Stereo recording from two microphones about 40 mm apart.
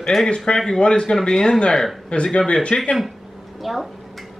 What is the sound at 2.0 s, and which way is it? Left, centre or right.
Speech, left.